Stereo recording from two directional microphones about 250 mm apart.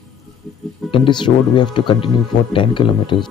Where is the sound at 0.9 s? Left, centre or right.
Centre.